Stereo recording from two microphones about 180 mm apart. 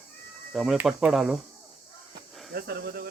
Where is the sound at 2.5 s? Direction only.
60° right (ahead or behind).